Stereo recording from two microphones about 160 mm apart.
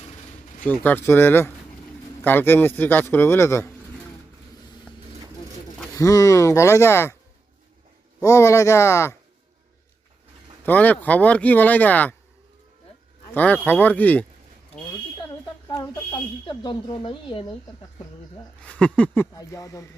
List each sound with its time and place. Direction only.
0.6 s speech: 10° left (ahead or behind)
5.9 s speech: 20° left (ahead or behind)
8.2 s speech: 20° left (ahead or behind)
10.7 s speech: 10° left (ahead or behind)
13.3 s speech: 10° left (ahead or behind)
15.6 s speech: 25° left (ahead or behind)
18.6 s speech: 10° left (ahead or behind)